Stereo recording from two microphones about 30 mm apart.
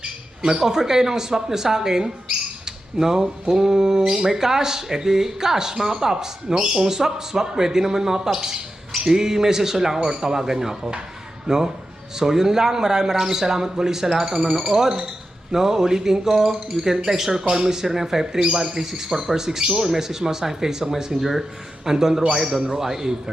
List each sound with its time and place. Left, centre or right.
0.4 s speech: centre
2.6 s squawk: centre
3.5 s speech: right